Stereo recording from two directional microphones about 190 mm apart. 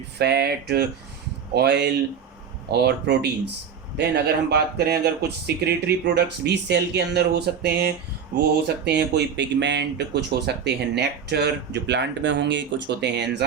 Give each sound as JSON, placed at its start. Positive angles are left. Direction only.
{"t": 0.2, "sound": "speech", "side_deg": -60}